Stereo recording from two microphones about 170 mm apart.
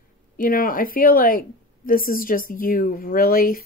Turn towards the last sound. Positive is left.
turn(degrees=55)  # may be behind; listen again after turning